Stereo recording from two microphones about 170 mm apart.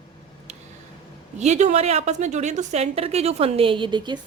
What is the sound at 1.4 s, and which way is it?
A woman's voice, 45° right (ahead or behind).